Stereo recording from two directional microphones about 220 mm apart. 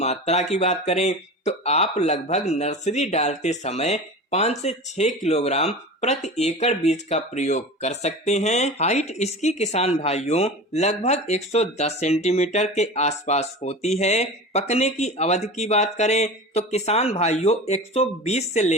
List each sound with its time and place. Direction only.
0.0 s speech: 30° left (ahead or behind)